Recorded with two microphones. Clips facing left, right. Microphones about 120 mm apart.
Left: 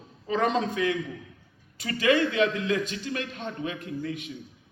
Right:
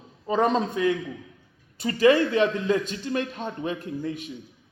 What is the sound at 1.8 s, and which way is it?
A man's voice, 35° right (ahead or behind).